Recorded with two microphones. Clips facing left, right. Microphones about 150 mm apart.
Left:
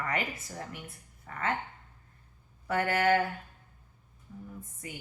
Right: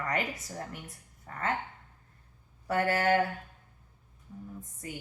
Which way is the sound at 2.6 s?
35° right (ahead or behind).